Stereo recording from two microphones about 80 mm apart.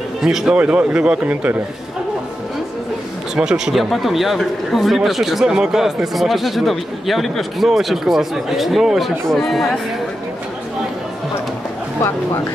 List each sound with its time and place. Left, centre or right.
0.2 s a man's voice: centre
0.6 s a man's voice: centre
3.3 s a man's voice: centre